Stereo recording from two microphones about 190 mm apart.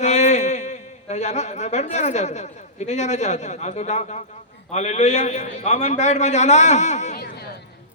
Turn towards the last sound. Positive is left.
turn(degrees=60)  # may be behind; listen again after turning